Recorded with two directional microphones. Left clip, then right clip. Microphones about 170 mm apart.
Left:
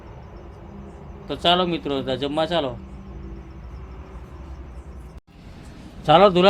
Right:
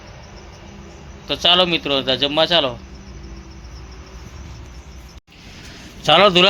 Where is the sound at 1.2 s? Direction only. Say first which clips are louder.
Right 5 dB; 15° right (ahead or behind).